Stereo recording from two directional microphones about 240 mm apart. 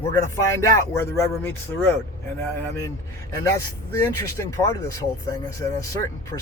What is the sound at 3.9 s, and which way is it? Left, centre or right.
Speech, centre.